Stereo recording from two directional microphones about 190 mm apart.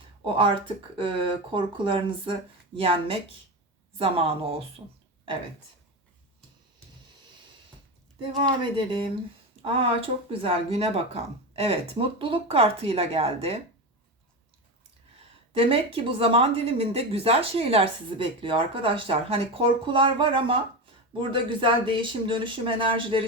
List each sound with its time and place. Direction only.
0.9 s speech: 25° right (ahead or behind)
8.2 s speech: 25° right (ahead or behind)
15.5 s speech: 30° right (ahead or behind)